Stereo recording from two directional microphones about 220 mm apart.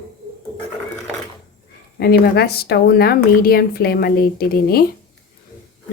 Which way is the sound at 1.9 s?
45° left (ahead or behind).